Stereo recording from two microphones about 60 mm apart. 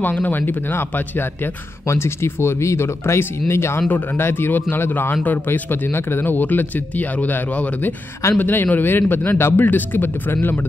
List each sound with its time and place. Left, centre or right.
0.0 s speech: left
1.9 s speech: left